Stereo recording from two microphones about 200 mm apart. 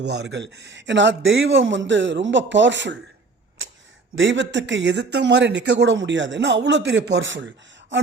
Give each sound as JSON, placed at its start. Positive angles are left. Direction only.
{"t": 0.0, "sound": "speech", "side_deg": -60}
{"t": 3.6, "sound": "a sound", "side_deg": -75}
{"t": 4.1, "sound": "speech", "side_deg": -65}